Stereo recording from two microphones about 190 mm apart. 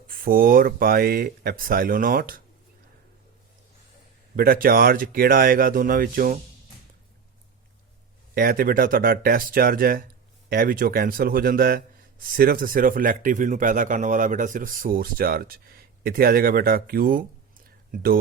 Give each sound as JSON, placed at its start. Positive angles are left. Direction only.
{"t": 0.1, "sound": "speech", "side_deg": -50}
{"t": 4.4, "sound": "speech", "side_deg": -50}
{"t": 8.4, "sound": "speech", "side_deg": -50}